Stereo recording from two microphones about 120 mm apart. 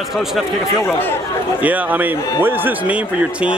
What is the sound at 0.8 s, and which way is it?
Speech, 15° left (ahead or behind).